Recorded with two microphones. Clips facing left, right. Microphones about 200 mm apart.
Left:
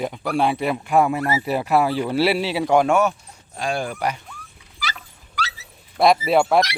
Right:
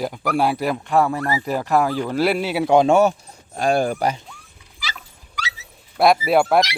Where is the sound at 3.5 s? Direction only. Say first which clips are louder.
Right 6 dB; 40° right (ahead or behind).